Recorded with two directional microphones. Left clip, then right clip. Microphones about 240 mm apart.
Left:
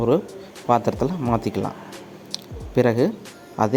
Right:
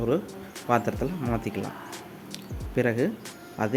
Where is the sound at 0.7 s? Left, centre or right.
Centre.